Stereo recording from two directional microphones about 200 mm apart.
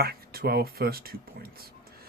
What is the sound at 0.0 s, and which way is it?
Speech, 50° right (ahead or behind).